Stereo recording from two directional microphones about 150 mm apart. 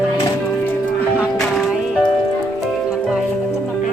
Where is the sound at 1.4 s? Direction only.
5° left (ahead or behind).